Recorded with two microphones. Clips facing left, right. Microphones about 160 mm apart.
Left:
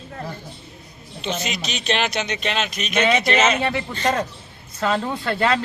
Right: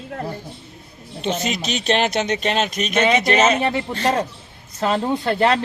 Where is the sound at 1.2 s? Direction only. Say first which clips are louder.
Right 4 dB; 50° right (ahead or behind).